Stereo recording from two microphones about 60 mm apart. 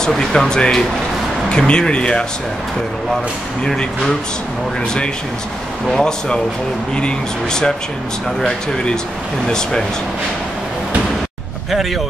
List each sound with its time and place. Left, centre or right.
0.0 s speech: centre
3.6 s speech: centre
5.9 s speech: centre
11.7 s speech: centre